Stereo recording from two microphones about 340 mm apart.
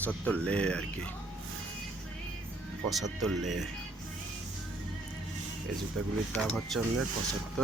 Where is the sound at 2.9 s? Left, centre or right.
Centre.